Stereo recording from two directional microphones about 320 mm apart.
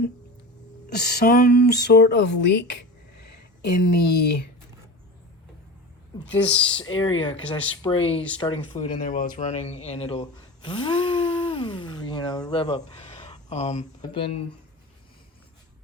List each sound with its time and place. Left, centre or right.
0.9 s speech: left
3.2 s a sound: left
6.1 s a woman's voice: centre